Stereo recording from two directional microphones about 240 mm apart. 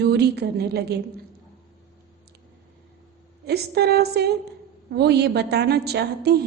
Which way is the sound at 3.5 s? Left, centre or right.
Right.